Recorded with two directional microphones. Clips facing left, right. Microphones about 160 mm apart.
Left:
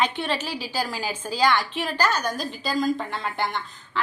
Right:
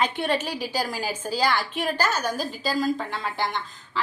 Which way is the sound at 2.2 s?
5° right (ahead or behind).